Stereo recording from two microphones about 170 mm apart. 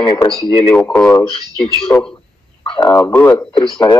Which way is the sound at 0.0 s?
25° left (ahead or behind).